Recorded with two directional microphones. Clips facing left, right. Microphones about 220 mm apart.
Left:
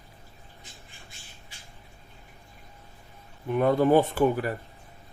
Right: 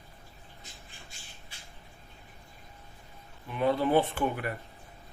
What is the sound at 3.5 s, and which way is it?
Speech, 50° left (ahead or behind).